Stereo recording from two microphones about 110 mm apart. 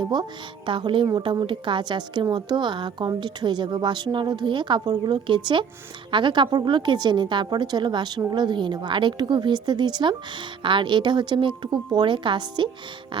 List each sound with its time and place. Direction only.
0.0 s a woman's voice: 40° right (ahead or behind)